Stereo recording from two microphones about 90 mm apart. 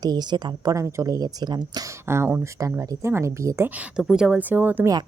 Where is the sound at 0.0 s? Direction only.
50° right (ahead or behind).